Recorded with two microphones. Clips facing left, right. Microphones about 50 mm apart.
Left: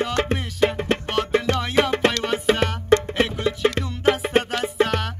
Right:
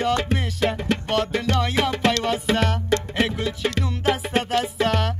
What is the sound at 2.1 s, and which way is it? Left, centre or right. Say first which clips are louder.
Music: even; centre.